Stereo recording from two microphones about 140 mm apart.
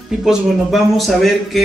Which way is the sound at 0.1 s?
5° right (ahead or behind).